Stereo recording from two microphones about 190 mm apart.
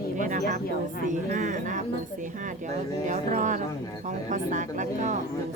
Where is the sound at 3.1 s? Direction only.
40° right (ahead or behind).